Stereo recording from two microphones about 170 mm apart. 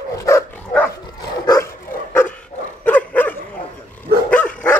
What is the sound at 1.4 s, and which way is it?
Dog, 20° left (ahead or behind).